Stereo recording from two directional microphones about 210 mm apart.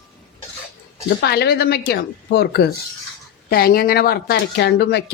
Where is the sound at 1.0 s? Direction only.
50° left (ahead or behind).